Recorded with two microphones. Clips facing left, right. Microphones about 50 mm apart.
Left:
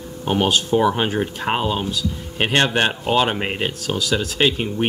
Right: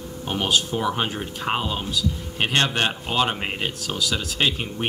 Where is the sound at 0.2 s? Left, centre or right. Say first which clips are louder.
Left 7 dB; left.